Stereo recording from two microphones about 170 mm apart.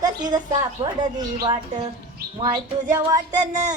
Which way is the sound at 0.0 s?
25° right (ahead or behind).